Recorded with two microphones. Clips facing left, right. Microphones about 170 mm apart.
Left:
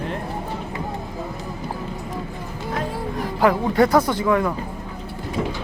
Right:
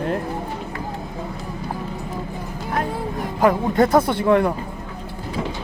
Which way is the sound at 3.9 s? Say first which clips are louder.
Right 1 dB; 25° right (ahead or behind).